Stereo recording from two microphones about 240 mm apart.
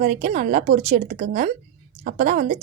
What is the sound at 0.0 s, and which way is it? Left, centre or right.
A woman's voice, right.